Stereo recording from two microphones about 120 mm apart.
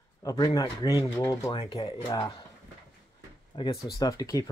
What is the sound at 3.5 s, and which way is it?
Speech, 40° left (ahead or behind).